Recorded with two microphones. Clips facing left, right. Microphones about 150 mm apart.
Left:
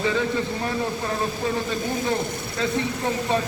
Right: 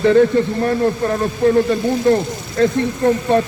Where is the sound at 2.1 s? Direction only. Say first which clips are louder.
Right 10 dB; 60° right (ahead or behind).